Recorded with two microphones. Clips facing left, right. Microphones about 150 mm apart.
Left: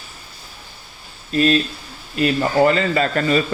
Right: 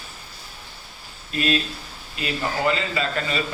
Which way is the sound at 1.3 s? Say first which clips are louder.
Left 7 dB; 40° left (ahead or behind).